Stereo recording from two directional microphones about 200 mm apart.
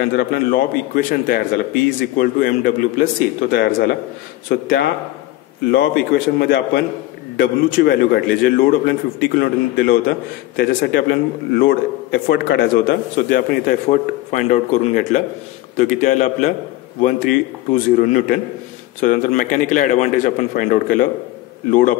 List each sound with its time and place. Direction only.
0.0 s a man's voice: 55° left (ahead or behind)
3.5 s a man's voice: 55° left (ahead or behind)